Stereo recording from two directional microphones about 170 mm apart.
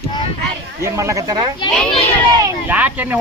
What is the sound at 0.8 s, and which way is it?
Speech, 15° right (ahead or behind).